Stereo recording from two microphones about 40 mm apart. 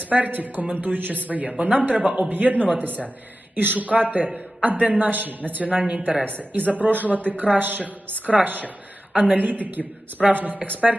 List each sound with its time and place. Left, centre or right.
0.0 s a woman's voice: right
0.7 s a man's voice: right
0.9 s a woman's voice: right
1.5 s a man's voice: right
2.3 s a woman's voice: right
5.1 s a woman's voice: right
9.1 s speech: right
9.4 s a woman's voice: right